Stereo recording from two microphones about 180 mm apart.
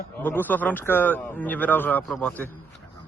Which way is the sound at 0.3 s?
10° left (ahead or behind).